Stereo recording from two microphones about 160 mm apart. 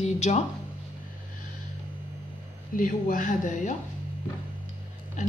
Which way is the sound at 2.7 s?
55° left (ahead or behind).